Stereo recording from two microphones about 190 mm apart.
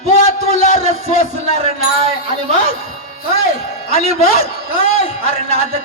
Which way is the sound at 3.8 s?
50° left (ahead or behind).